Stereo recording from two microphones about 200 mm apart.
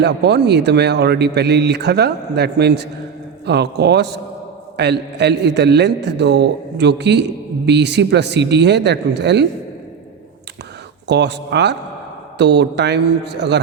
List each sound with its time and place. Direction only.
0.0 s a man's voice: 55° right (ahead or behind)
11.1 s a man's voice: 60° right (ahead or behind)